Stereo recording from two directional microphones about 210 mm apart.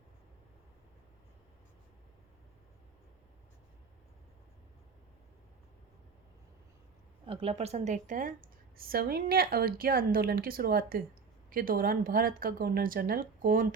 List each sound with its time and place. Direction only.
7.3 s a woman's voice: 25° right (ahead or behind)